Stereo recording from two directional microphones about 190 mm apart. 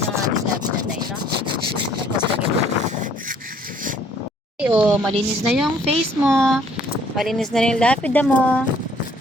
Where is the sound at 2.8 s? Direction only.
45° right (ahead or behind).